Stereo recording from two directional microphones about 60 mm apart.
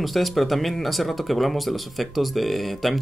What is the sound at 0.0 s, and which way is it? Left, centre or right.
Speech, centre.